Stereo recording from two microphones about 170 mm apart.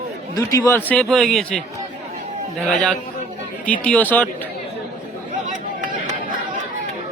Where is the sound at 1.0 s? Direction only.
Centre (ahead or behind).